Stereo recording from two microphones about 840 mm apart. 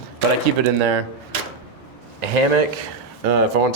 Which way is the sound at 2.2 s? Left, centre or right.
Right.